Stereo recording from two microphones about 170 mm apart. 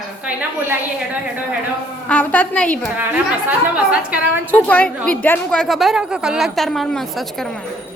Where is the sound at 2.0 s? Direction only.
10° left (ahead or behind).